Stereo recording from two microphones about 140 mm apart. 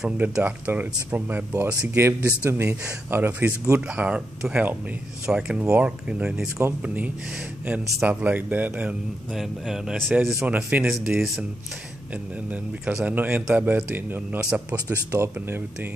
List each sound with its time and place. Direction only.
0.0 s a man's voice: 10° right (ahead or behind)
10.4 s a man's voice: 10° right (ahead or behind)
12.4 s a man's voice: 10° right (ahead or behind)
14.7 s speech: 25° right (ahead or behind)